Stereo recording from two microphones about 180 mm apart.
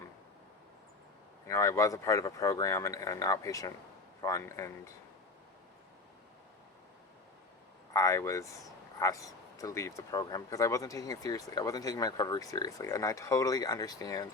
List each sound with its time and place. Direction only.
1.5 s speech: 15° left (ahead or behind)
7.9 s speech: 15° left (ahead or behind)